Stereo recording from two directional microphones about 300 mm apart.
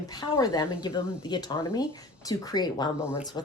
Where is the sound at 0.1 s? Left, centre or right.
Centre.